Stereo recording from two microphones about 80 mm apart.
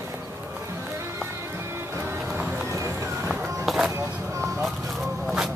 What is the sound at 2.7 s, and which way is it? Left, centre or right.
Run, right.